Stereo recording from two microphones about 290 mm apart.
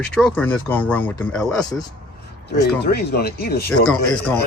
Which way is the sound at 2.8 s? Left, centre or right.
Left.